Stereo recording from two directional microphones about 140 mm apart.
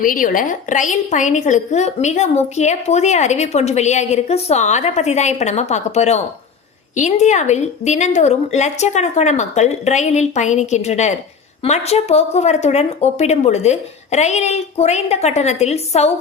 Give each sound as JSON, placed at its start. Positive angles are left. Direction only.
{"t": 0.0, "sound": "a woman's voice", "side_deg": 80}